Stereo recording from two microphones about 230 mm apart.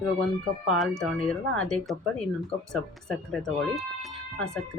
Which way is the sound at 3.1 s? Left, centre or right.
Centre.